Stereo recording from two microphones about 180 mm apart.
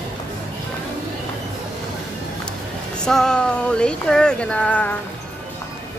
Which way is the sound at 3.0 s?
5° left (ahead or behind).